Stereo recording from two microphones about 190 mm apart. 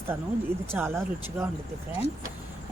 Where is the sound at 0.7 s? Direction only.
10° right (ahead or behind).